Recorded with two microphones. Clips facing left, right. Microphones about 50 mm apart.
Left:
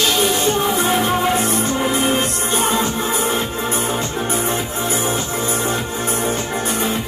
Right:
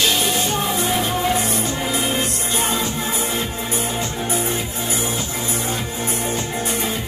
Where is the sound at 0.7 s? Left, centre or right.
Left.